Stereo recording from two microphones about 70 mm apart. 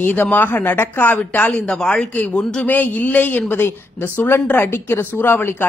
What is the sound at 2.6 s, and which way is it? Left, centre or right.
A woman's voice, left.